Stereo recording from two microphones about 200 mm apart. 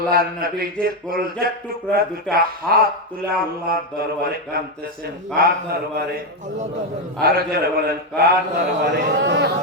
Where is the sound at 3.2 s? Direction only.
50° right (ahead or behind).